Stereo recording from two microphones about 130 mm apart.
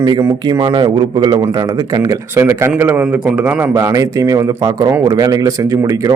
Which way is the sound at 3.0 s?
5° right (ahead or behind).